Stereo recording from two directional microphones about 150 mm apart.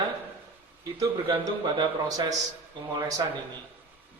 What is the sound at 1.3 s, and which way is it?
A man's voice, 30° right (ahead or behind).